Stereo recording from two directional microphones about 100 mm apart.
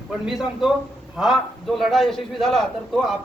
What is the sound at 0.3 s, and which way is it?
A man's voice, 5° right (ahead or behind).